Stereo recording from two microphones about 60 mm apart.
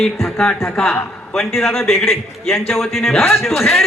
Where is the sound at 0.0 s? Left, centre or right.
Centre.